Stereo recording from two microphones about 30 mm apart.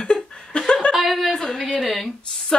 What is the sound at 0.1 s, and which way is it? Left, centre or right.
Laughter, left.